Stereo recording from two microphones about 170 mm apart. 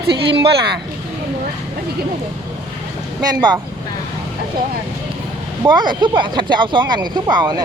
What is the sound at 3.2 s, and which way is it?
Speech, 25° right (ahead or behind).